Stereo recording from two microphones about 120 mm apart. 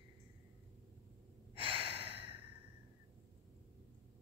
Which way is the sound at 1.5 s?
50° right (ahead or behind).